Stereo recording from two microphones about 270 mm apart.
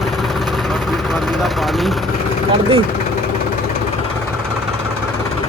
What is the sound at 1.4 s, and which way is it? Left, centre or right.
Vehicle, centre.